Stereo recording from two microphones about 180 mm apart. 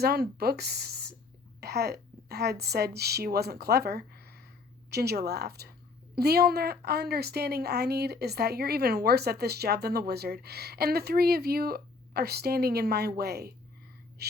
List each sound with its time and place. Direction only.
0.0 s a woman's voice: 60° right (ahead or behind)
14.2 s gasp: 65° right (ahead or behind)